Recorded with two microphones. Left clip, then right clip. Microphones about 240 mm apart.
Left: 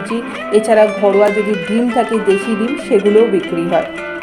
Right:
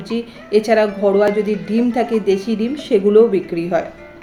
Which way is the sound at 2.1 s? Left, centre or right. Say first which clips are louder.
Left 3 dB; left.